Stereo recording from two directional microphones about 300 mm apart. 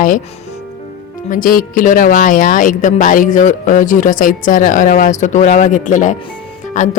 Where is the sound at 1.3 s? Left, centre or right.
Left.